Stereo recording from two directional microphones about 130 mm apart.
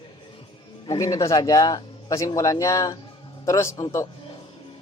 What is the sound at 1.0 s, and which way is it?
Speech, 25° left (ahead or behind).